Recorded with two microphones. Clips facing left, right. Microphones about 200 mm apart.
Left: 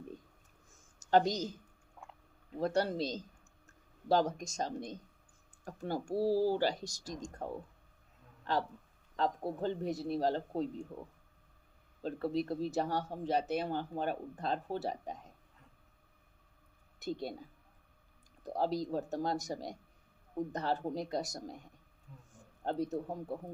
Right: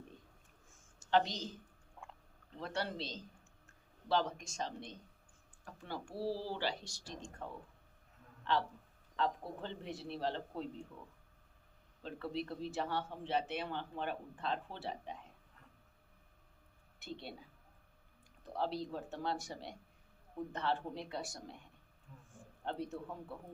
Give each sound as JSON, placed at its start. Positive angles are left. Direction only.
{"t": 0.9, "sound": "speech", "side_deg": 40}
{"t": 2.0, "sound": "a sound", "side_deg": 5}
{"t": 2.6, "sound": "speech", "side_deg": 40}
{"t": 12.0, "sound": "speech", "side_deg": 40}
{"t": 17.0, "sound": "speech", "side_deg": 40}
{"t": 18.4, "sound": "speech", "side_deg": 40}